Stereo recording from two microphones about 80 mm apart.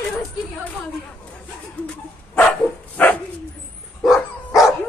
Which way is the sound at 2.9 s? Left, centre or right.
Left.